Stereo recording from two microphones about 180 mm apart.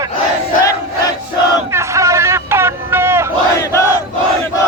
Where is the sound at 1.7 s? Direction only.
15° right (ahead or behind).